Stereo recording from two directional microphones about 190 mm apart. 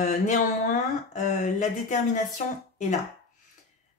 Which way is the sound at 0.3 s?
40° left (ahead or behind).